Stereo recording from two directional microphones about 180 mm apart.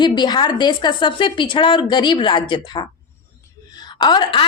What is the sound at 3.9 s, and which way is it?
Speech, 25° left (ahead or behind).